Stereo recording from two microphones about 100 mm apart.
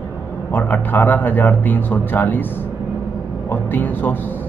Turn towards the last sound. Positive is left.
turn(degrees=20)  # may be behind; listen again after turning